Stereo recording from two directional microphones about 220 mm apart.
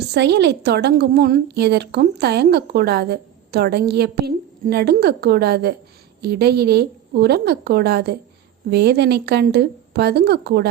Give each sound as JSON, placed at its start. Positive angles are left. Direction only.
{"t": 0.1, "sound": "a woman's voice", "side_deg": -50}